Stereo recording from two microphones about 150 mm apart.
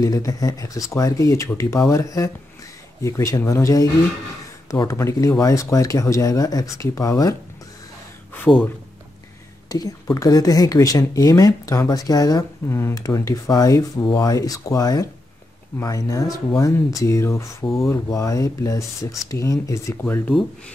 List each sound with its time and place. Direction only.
0.0 s speech: 25° left (ahead or behind)
8.5 s speech: 10° left (ahead or behind)
9.7 s speech: 25° left (ahead or behind)